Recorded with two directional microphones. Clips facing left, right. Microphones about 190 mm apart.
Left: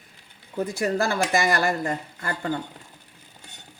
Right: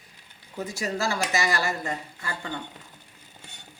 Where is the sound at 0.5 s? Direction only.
55° left (ahead or behind).